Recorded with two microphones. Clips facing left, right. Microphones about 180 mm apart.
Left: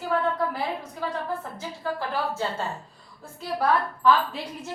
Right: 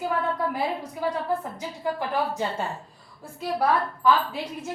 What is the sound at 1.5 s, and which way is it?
Speech, 15° right (ahead or behind).